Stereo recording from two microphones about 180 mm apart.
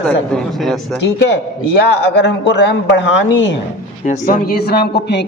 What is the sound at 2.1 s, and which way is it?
Speech, 80° left.